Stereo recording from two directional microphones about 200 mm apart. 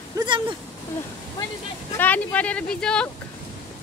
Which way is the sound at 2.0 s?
10° left (ahead or behind).